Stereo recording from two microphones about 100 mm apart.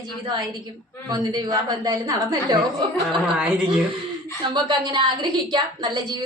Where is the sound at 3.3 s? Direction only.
10° right (ahead or behind).